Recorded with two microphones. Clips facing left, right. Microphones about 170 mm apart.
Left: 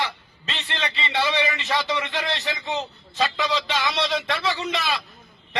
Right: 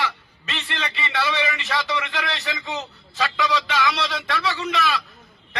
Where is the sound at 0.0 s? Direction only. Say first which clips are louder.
Right 1 dB; 25° left (ahead or behind).